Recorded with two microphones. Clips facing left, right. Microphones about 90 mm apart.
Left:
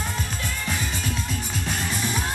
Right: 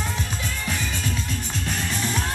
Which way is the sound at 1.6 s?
5° left (ahead or behind).